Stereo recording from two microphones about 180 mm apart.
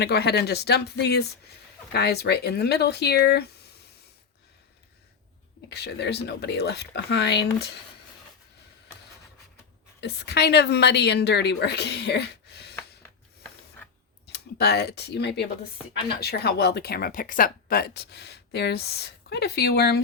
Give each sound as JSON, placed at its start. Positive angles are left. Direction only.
{"t": 0.0, "sound": "speech", "side_deg": 65}
{"t": 5.6, "sound": "a woman's voice", "side_deg": 65}
{"t": 10.0, "sound": "a woman's voice", "side_deg": 70}
{"t": 14.3, "sound": "speech", "side_deg": 65}